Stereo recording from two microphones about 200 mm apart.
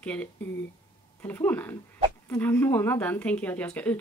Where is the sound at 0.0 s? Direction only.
5° left (ahead or behind).